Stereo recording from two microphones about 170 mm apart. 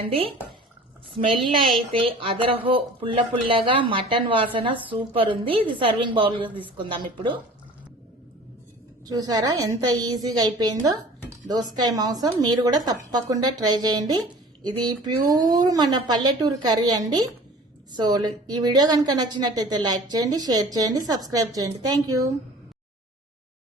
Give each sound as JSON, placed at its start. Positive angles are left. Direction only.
{"t": 0.0, "sound": "a woman's voice", "side_deg": -35}
{"t": 9.0, "sound": "a woman's voice", "side_deg": -20}